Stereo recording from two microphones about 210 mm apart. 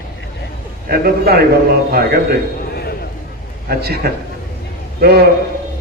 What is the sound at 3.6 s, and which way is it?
A man's voice, 50° right (ahead or behind).